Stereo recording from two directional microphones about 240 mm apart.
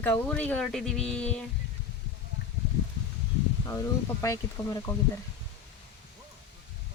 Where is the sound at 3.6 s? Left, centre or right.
Centre.